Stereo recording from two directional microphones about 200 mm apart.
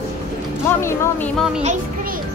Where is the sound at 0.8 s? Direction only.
15° left (ahead or behind).